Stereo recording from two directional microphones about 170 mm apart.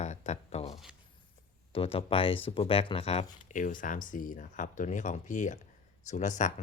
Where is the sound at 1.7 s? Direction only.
35° left (ahead or behind).